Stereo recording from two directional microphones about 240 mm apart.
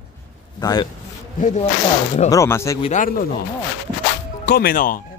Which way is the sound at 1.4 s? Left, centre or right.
Left.